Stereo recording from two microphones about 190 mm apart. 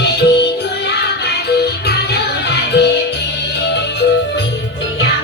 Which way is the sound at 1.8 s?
60° left (ahead or behind).